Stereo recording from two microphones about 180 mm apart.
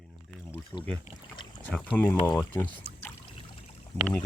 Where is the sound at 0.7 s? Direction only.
10° left (ahead or behind).